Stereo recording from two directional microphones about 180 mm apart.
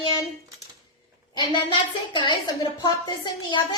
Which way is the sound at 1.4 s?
30° left (ahead or behind).